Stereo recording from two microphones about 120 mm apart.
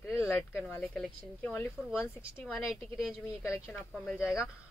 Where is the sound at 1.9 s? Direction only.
5° right (ahead or behind).